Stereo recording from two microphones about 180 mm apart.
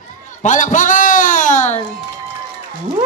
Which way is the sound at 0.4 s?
45° left (ahead or behind).